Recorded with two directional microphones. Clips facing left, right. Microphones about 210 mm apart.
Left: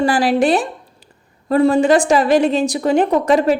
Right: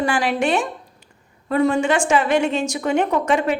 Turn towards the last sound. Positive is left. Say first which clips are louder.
# left 5 dB
turn(degrees=35)  # may be behind; listen again after turning